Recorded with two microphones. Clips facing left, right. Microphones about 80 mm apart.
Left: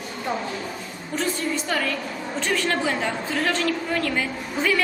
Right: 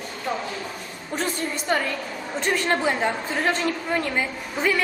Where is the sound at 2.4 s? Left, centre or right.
Right.